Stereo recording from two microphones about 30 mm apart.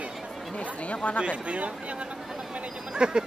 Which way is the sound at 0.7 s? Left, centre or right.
Left.